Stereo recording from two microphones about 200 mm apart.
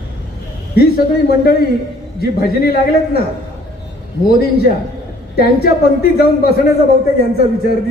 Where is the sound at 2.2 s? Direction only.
50° left (ahead or behind).